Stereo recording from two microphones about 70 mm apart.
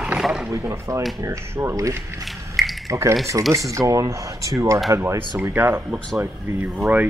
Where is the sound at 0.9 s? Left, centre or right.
Right.